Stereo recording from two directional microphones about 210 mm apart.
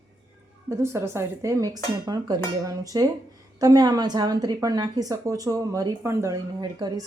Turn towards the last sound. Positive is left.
turn(degrees=-20)  # may be behind; listen again after turning